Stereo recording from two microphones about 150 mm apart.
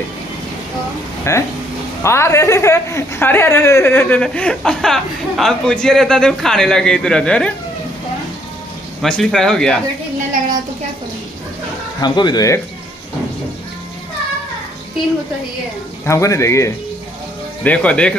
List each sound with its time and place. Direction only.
1.3 s a woman's voice: 20° left (ahead or behind)
9.0 s speech: 5° left (ahead or behind)
12.0 s speech: 30° left (ahead or behind)
16.1 s speech: 20° left (ahead or behind)
17.6 s a woman's voice: 10° left (ahead or behind)